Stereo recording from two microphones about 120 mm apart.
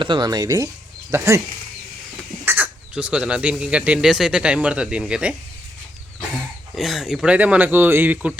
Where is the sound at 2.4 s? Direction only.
15° right (ahead or behind).